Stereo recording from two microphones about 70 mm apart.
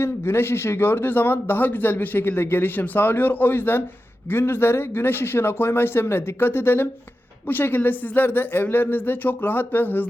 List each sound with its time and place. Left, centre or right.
0.0 s speech: left